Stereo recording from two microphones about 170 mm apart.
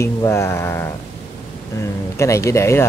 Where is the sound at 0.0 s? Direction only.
15° left (ahead or behind).